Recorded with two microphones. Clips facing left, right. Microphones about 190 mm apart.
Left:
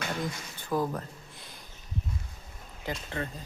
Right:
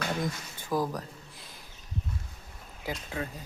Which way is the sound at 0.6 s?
10° right (ahead or behind).